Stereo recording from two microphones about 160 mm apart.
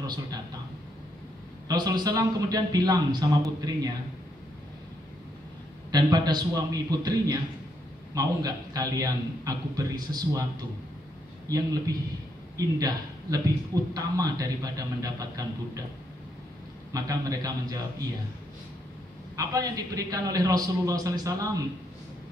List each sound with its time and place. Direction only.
0.0 s a man's voice: 25° right (ahead or behind)
1.7 s a man's voice: 25° right (ahead or behind)
5.9 s a man's voice: 25° right (ahead or behind)
11.4 s a man's voice: 20° right (ahead or behind)
16.9 s a man's voice: 20° right (ahead or behind)
19.3 s a man's voice: 20° right (ahead or behind)